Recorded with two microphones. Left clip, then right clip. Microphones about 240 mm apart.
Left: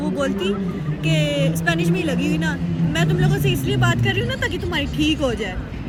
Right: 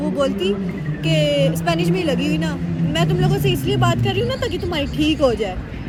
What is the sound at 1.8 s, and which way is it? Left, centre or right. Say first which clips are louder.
Speech: right 2 dB; centre.